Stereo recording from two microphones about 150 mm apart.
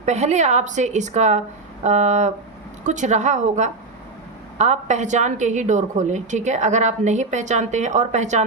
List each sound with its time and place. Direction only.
0.0 s a woman's voice: 50° right (ahead or behind)